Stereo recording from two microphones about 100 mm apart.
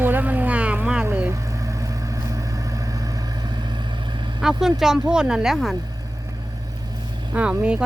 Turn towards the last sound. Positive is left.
turn(degrees=-10)  # may be behind; listen again after turning